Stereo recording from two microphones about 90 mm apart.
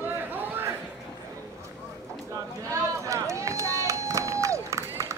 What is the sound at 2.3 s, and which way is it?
Run, 35° right (ahead or behind).